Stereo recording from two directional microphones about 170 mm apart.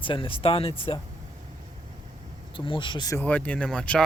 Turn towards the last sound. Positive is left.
turn(degrees=5)  # may be behind; listen again after turning